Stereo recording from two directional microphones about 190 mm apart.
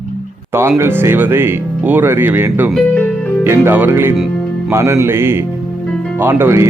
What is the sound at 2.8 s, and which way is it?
Music, 5° left (ahead or behind).